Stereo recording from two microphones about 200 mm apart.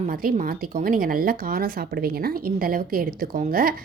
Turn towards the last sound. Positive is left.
turn(degrees=-45)  # may be behind; listen again after turning